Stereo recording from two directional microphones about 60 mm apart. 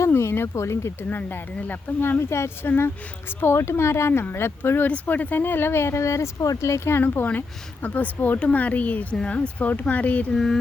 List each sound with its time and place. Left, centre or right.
0.1 s speech: left
1.5 s speech: left
2.0 s speech: left
4.9 s speech: left
7.0 s speech: left
7.3 s speech: left
10.3 s a sound: centre